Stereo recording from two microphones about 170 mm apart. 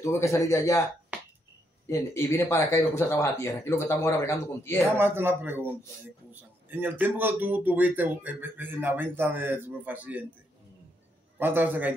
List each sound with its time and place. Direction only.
0.0 s speech: 15° left (ahead or behind)
1.9 s speech: 15° left (ahead or behind)
4.9 s speech: 15° right (ahead or behind)
6.7 s speech: 10° right (ahead or behind)
11.3 s speech: 10° right (ahead or behind)